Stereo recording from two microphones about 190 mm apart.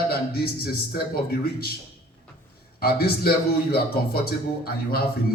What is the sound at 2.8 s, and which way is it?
Speech, 55° left (ahead or behind).